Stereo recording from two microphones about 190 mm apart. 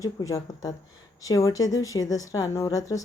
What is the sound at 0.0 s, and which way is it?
A woman's voice, 15° left (ahead or behind).